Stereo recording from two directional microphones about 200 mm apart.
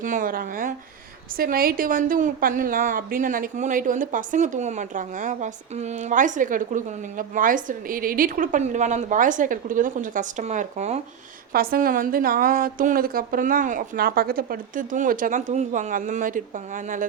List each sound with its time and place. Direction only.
0.0 s a woman's voice: 40° right (ahead or behind)
11.5 s a woman's voice: 50° right (ahead or behind)